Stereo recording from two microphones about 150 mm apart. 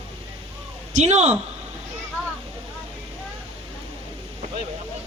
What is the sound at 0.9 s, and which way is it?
Speech, 50° right (ahead or behind).